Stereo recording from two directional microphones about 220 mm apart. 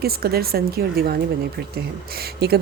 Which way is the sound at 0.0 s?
45° right (ahead or behind).